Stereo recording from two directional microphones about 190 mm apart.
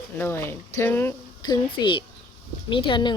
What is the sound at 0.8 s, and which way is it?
Speech, 10° left (ahead or behind).